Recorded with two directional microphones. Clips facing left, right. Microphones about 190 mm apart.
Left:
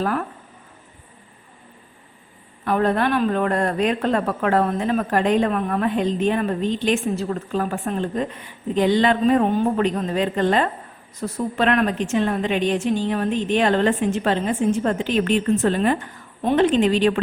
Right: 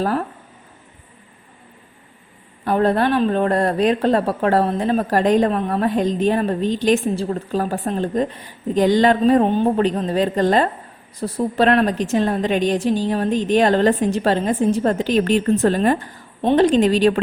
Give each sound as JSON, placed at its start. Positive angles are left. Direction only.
{"t": 0.0, "sound": "speech", "side_deg": -35}
{"t": 2.6, "sound": "speech", "side_deg": -30}